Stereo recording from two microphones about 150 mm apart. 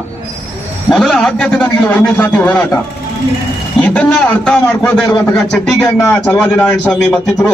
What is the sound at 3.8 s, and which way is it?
A man's voice, 10° left (ahead or behind).